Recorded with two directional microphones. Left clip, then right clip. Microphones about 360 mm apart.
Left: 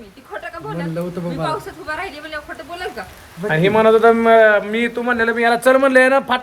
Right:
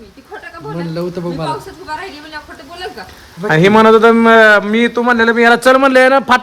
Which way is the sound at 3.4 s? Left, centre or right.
Right.